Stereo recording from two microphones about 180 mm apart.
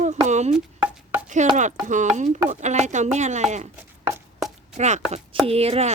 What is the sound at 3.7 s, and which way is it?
Chopping, 10° right (ahead or behind).